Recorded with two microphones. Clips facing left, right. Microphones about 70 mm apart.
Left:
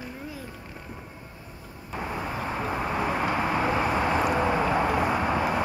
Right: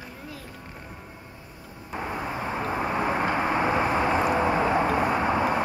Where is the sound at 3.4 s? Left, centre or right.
Right.